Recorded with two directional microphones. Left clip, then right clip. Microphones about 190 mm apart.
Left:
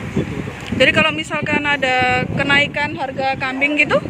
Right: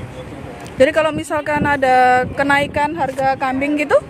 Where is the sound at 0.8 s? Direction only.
25° right (ahead or behind).